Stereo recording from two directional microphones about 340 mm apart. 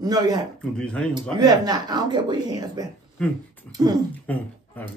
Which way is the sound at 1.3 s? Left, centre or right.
Centre.